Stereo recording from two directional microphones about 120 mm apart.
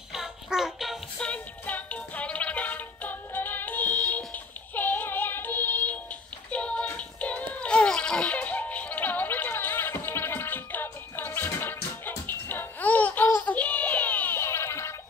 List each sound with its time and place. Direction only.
0.1 s music: 5° right (ahead or behind); by 5.9 s 15° left (ahead or behind)
6.5 s child singing: 10° left (ahead or behind)
12.3 s music: 15° left (ahead or behind)